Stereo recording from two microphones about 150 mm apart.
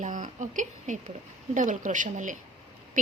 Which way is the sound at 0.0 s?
55° right (ahead or behind).